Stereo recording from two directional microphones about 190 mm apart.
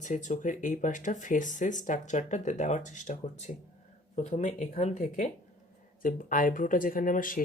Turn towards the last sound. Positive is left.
turn(degrees=45)  # may be behind; listen again after turning